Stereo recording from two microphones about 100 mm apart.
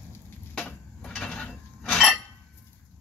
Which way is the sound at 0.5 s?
10° left (ahead or behind).